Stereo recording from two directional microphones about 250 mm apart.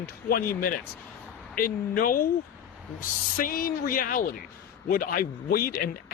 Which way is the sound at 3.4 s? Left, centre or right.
Left.